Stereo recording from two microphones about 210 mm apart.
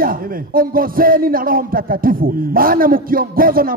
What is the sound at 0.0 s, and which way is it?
A man's voice, 45° right (ahead or behind).